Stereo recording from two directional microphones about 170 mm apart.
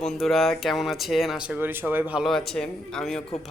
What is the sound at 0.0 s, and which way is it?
A man's voice, centre (ahead or behind).